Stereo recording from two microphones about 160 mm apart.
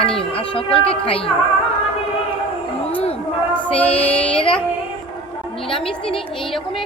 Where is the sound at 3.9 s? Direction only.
40° left (ahead or behind).